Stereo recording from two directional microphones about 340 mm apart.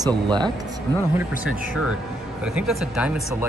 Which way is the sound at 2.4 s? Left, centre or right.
Centre.